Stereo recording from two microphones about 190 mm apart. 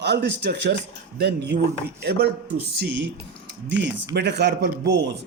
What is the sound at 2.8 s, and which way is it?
A man's voice, 70° right (ahead or behind).